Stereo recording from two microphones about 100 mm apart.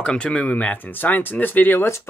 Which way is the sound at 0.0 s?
10° left (ahead or behind).